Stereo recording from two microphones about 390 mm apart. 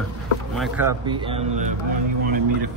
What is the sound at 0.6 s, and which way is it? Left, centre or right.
A man's voice, centre.